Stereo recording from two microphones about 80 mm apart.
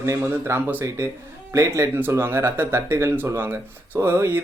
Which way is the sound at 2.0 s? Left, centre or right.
Right.